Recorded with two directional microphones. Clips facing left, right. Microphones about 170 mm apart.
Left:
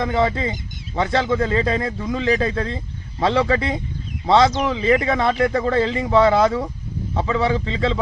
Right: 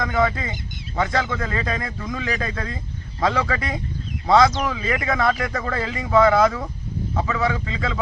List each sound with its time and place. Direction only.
0.0 s speech: 25° left (ahead or behind)